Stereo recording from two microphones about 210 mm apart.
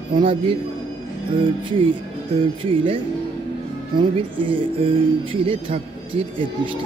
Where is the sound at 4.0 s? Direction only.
25° right (ahead or behind).